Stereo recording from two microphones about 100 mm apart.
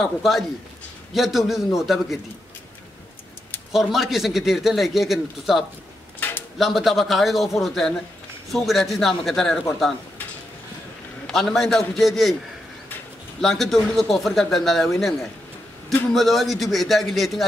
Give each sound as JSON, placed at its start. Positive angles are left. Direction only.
{"t": 0.0, "sound": "speech", "side_deg": 0}
{"t": 3.7, "sound": "speech", "side_deg": 0}
{"t": 6.1, "sound": "a sound", "side_deg": 20}
{"t": 6.6, "sound": "speech", "side_deg": 0}
{"t": 11.2, "sound": "speech", "side_deg": 5}
{"t": 13.4, "sound": "speech", "side_deg": 0}